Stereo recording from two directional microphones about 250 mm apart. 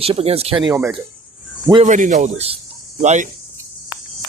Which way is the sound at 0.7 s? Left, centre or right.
Centre.